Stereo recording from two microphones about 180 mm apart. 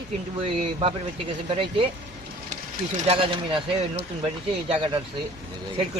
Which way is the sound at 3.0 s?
30° right (ahead or behind).